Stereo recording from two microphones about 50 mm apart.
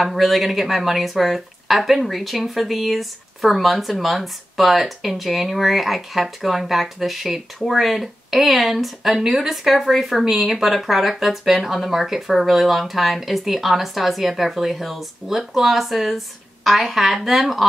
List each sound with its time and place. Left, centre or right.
0.0 s speech: centre